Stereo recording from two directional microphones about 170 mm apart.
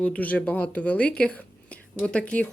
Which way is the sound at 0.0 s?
10° left (ahead or behind).